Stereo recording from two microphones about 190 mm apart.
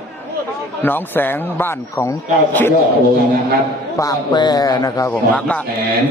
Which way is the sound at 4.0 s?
20° left (ahead or behind).